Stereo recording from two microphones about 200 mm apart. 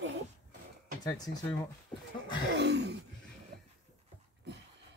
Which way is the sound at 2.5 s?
60° right (ahead or behind).